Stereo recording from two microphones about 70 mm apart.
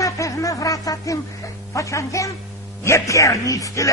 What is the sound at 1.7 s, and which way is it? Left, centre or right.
Speech, left.